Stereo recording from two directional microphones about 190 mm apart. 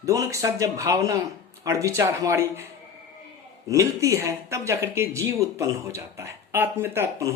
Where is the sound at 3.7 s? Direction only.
15° right (ahead or behind).